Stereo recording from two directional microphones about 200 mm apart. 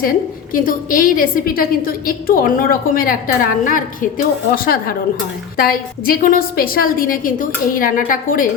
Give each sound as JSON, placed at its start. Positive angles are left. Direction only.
{"t": 0.5, "sound": "a woman's voice", "side_deg": 45}